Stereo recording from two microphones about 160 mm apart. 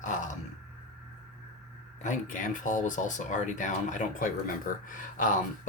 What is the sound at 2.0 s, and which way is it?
Speech, 50° left (ahead or behind).